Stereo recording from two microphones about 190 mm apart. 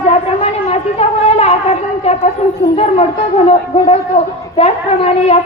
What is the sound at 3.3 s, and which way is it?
Speech, 30° left (ahead or behind).